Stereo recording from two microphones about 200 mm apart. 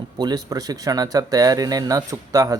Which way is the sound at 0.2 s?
20° right (ahead or behind).